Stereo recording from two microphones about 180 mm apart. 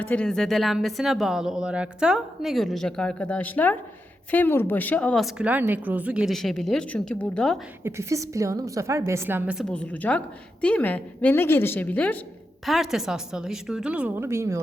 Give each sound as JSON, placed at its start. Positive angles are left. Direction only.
{"t": 0.0, "sound": "speech", "side_deg": 5}
{"t": 7.9, "sound": "a woman's voice", "side_deg": -15}
{"t": 9.6, "sound": "a woman's voice", "side_deg": 5}